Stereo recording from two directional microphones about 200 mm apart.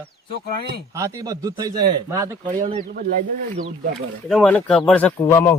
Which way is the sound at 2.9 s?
45° right (ahead or behind).